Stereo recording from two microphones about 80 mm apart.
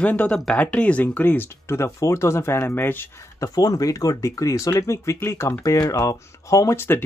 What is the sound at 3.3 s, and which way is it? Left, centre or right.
Speech, left.